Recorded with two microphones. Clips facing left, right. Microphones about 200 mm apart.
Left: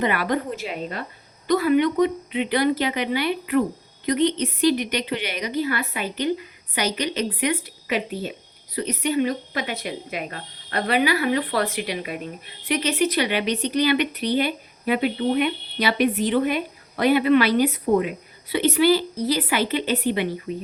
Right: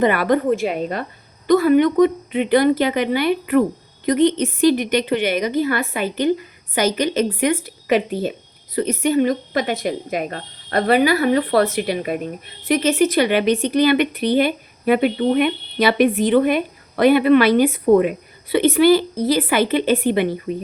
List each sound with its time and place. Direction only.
0.0 s speech: 50° right (ahead or behind)